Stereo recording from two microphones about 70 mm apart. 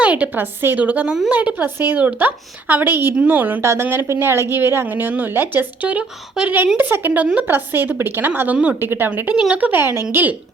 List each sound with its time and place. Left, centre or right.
0.0 s a woman's voice: centre
1.6 s a woman's voice: right
3.6 s speech: right; by 6.5 s centre
6.7 s a woman's voice: right